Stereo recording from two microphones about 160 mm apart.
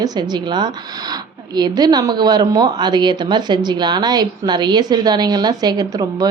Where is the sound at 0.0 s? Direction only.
25° right (ahead or behind).